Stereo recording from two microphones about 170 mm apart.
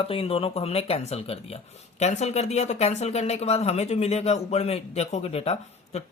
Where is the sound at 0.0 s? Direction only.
35° left (ahead or behind).